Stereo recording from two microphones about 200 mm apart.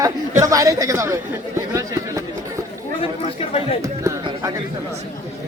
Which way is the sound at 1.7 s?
15° right (ahead or behind).